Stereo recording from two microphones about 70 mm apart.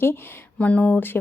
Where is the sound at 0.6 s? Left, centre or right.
Centre.